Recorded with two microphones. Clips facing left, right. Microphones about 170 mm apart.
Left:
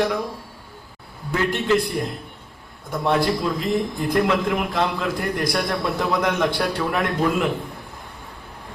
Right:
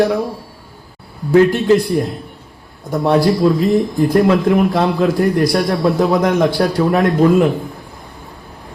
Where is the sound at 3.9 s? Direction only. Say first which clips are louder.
Right 7 dB; 45° right (ahead or behind).